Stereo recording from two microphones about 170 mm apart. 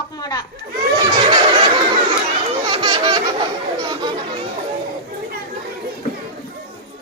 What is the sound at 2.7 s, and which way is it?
Laughter, 30° right (ahead or behind).